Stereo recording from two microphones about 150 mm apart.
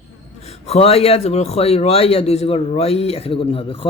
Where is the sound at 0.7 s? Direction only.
40° left (ahead or behind).